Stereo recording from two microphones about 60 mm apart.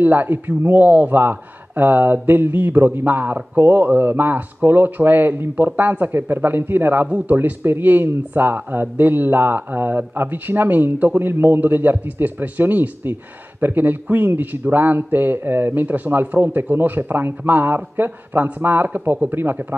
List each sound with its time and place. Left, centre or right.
0.0 s speech: right